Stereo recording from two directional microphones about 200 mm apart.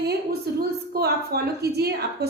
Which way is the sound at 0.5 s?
50° right (ahead or behind).